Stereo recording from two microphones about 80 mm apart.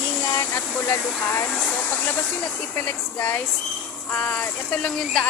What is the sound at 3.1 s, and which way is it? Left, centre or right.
Speech, left.